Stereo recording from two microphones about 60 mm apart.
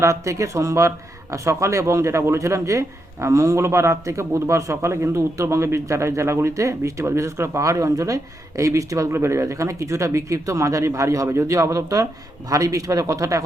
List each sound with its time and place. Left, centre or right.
0.0 s speech: right
9.1 s a man's voice: right